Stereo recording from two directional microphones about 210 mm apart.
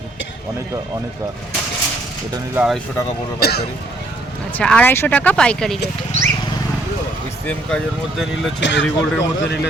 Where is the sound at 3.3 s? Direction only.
50° left (ahead or behind).